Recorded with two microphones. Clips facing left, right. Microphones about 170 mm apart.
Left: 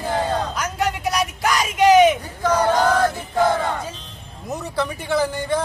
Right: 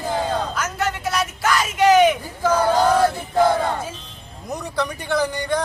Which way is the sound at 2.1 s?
10° right (ahead or behind).